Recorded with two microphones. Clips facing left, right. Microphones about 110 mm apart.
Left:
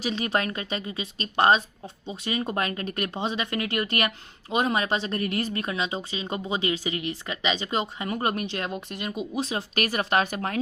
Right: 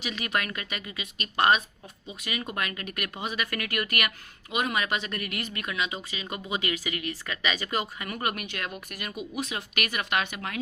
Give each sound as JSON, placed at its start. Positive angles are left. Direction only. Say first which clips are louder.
{"t": 0.0, "sound": "speech", "louder": "left 5 dB", "side_deg": 30}